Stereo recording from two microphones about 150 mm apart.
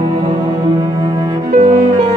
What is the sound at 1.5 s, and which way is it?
Music, 60° right (ahead or behind).